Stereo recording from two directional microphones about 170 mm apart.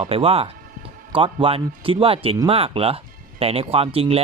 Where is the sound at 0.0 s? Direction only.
35° right (ahead or behind).